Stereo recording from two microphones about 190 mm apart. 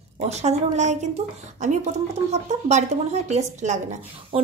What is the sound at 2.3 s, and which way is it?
A woman's voice, 35° right (ahead or behind).